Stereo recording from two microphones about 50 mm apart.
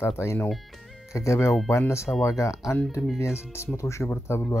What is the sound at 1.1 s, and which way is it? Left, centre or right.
Speech, left.